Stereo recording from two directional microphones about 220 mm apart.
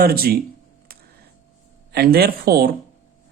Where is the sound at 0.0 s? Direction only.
45° right (ahead or behind).